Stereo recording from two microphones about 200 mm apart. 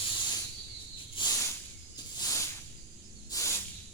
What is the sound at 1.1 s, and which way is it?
Snake, 20° left (ahead or behind).